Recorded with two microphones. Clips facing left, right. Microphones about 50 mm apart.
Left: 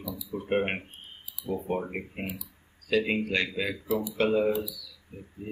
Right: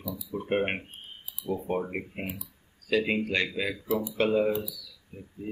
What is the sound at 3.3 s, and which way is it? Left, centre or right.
Speech, centre.